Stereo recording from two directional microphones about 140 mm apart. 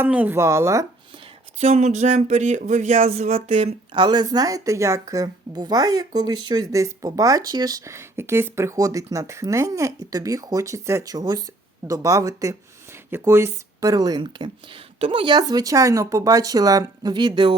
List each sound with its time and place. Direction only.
0.0 s a woman's voice: 10° right (ahead or behind)
1.5 s speech: 50° right (ahead or behind)
4.0 s a woman's voice: 30° right (ahead or behind)